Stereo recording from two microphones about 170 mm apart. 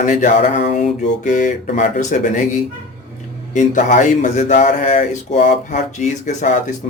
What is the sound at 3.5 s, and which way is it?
Speech, 45° left (ahead or behind).